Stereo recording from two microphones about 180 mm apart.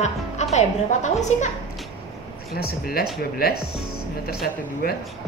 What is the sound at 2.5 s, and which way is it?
Speech, 60° left (ahead or behind).